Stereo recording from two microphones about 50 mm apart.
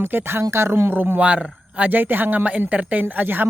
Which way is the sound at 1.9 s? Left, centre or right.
Right.